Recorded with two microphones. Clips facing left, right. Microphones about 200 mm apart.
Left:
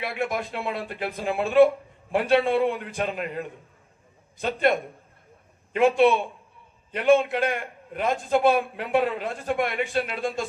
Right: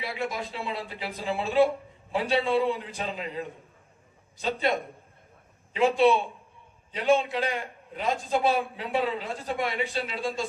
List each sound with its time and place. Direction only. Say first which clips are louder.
0.0 s speech: left 4 dB; 55° left (ahead or behind)
6.0 s a man's voice: left 2 dB; 55° left (ahead or behind)